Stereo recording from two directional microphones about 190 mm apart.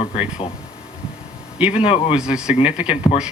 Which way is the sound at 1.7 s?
30° left (ahead or behind).